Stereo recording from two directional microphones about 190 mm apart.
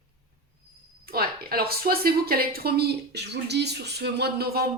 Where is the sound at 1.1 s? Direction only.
50° right (ahead or behind).